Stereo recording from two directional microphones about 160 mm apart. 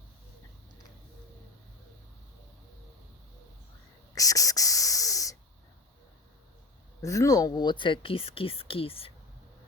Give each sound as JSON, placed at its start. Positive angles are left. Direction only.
{"t": 4.1, "sound": "whispering", "side_deg": 20}
{"t": 7.0, "sound": "speech", "side_deg": 20}